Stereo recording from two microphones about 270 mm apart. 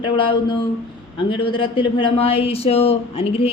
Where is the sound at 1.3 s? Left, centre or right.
Centre.